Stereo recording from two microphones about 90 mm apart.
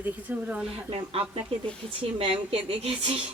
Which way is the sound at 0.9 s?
90° right.